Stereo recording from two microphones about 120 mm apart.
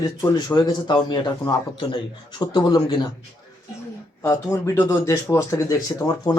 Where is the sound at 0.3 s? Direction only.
35° left (ahead or behind).